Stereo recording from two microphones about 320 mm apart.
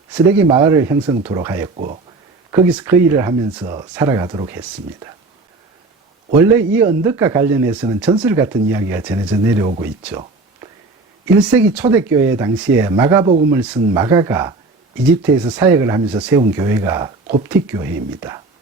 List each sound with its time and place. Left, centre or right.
0.1 s speech: centre
1.7 s speech: right
2.5 s speech: centre
6.7 s speech: centre
11.3 s speech: centre